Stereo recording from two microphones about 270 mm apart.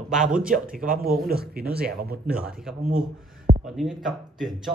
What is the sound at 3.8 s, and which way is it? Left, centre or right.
Speech, centre.